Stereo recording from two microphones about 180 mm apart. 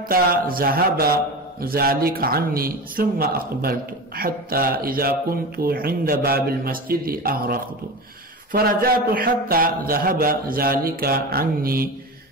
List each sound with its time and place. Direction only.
0.1 s a man's voice: 55° right (ahead or behind)